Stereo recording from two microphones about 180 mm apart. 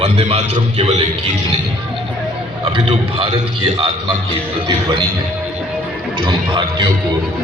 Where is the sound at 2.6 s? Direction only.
30° right (ahead or behind).